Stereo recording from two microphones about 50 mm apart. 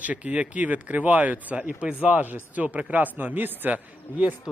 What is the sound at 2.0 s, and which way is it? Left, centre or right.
A man's voice, right.